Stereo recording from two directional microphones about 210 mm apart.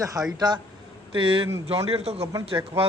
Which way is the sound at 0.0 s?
15° right (ahead or behind).